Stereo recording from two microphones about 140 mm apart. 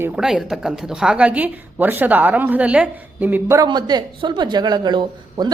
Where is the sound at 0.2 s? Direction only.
5° right (ahead or behind).